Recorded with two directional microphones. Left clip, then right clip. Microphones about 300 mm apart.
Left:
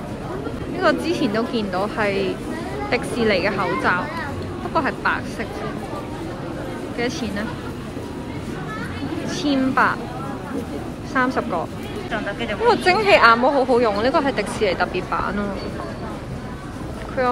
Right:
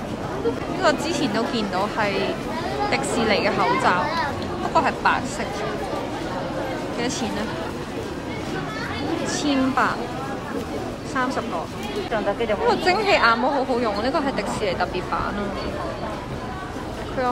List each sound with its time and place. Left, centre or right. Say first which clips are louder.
0.7 s speech: left 3 dB; centre
7.0 s speech: left 3 dB; centre
9.3 s speech: left 3 dB; centre
11.1 s speech: left 4 dB; centre
12.1 s speech: right 3 dB; right
12.6 s speech: left 5 dB; centre